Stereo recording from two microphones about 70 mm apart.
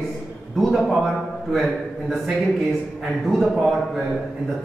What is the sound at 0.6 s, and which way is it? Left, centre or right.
A man's voice, centre.